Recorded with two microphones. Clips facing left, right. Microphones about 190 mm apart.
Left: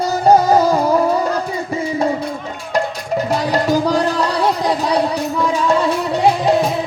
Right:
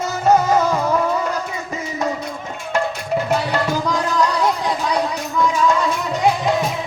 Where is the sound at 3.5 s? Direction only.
40° left (ahead or behind).